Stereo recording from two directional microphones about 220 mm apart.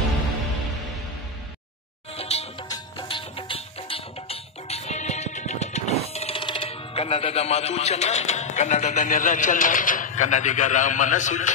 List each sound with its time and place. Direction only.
2.1 s music: 30° left (ahead or behind)
11.1 s a man's voice: 35° left (ahead or behind)